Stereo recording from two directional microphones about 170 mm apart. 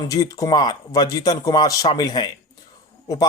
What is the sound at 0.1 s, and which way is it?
Speech, 20° left (ahead or behind).